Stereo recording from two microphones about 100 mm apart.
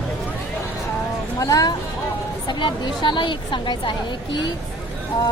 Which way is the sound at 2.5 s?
50° left (ahead or behind).